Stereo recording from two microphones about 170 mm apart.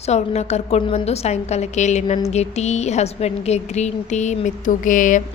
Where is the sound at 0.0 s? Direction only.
40° left (ahead or behind).